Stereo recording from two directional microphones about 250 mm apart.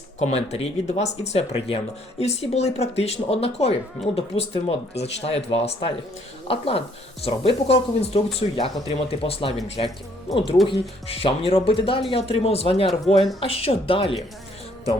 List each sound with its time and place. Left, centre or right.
0.2 s speech: left